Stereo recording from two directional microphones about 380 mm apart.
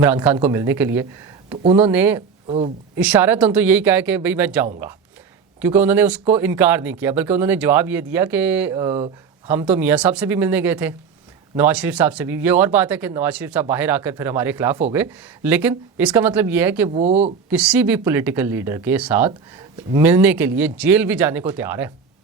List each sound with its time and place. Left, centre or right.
0.0 s speech: centre
2.5 s speech: centre
3.0 s speech: centre
17.0 s speech: centre
17.5 s speech: centre